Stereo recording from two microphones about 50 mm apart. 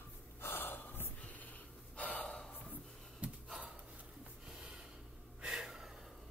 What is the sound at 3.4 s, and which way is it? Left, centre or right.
Gasp, centre.